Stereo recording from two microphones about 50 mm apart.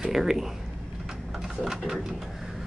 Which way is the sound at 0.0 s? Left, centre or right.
Centre.